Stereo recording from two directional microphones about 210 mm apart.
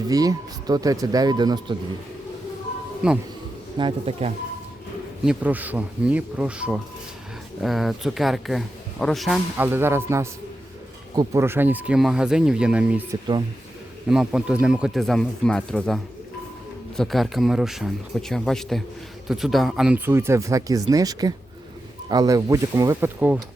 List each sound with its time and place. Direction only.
0.1 s speech: 15° right (ahead or behind)
3.0 s speech: 5° right (ahead or behind)
3.8 s speech: 25° right (ahead or behind)
5.2 s speech: 5° right (ahead or behind)
14.1 s speech: 5° right (ahead or behind)
17.0 s speech: centre (ahead or behind)